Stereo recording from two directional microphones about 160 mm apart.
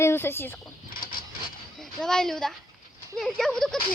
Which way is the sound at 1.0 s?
65° left (ahead or behind).